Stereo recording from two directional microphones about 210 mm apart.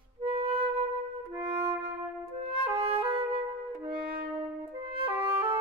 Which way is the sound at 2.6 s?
30° right (ahead or behind).